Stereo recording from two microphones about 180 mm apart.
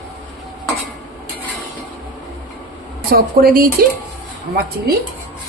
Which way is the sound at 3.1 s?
55° right (ahead or behind).